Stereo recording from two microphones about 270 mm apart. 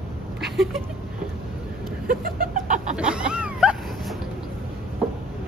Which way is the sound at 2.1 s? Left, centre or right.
Right.